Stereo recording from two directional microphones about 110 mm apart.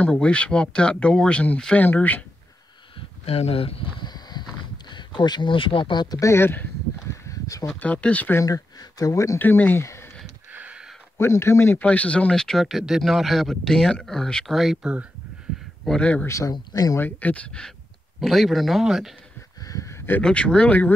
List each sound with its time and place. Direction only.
0.0 s speech: 10° left (ahead or behind)
3.3 s speech: 70° left (ahead or behind)
4.0 s a sound: 40° left (ahead or behind)
7.6 s speech: 15° left (ahead or behind)
8.5 s speech: 35° left (ahead or behind); by 9.8 s 20° left (ahead or behind)
9.8 s a sound: 25° left (ahead or behind)
10.5 s a sound: 10° right (ahead or behind)
11.1 s speech: 25° left (ahead or behind); by 15.0 s 10° right (ahead or behind)
15.8 s speech: 10° left (ahead or behind)
16.3 s speech: 30° left (ahead or behind)
17.0 s speech: 15° left (ahead or behind); by 19.1 s centre (ahead or behind)
19.6 s a sound: 30° left (ahead or behind)
20.2 s speech: 10° left (ahead or behind)